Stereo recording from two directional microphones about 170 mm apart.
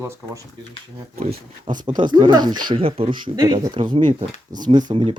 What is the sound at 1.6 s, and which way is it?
A man's voice, 25° right (ahead or behind).